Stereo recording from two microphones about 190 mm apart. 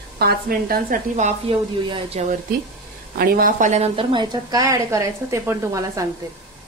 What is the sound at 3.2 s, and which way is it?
A woman's voice, 50° right (ahead or behind).